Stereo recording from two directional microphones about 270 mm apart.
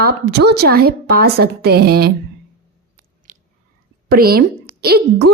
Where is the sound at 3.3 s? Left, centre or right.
Right.